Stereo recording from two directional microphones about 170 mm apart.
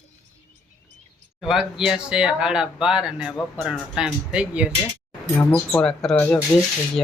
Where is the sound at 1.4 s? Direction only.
5° right (ahead or behind).